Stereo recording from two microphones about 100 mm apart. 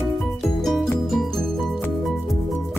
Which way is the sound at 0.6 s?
Centre (ahead or behind).